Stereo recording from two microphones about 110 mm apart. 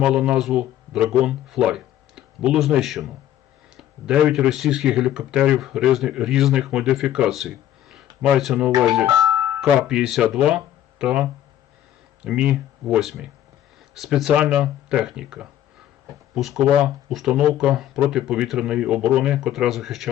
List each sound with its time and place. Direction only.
0.0 s speech: 5° right (ahead or behind)
9.0 s music: 35° right (ahead or behind)
9.6 s speech: 5° right (ahead or behind)